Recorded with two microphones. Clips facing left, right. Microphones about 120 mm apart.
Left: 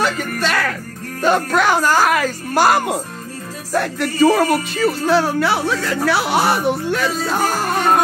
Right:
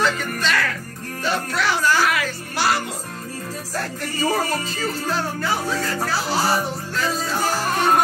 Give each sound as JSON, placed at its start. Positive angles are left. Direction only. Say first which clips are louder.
{"t": 0.4, "sound": "speech", "louder": "left 3 dB", "side_deg": 50}
{"t": 3.7, "sound": "music", "louder": "left 10 dB", "side_deg": 70}